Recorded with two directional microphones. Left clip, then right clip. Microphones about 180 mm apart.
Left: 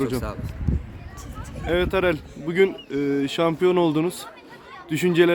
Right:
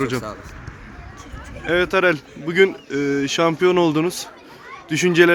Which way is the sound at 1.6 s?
Centre (ahead or behind).